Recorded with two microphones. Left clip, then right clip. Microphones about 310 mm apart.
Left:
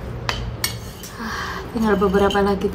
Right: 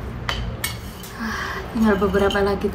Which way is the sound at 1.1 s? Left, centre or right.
Centre.